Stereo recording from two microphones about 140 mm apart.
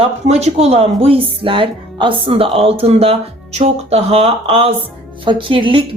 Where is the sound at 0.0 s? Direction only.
50° right (ahead or behind).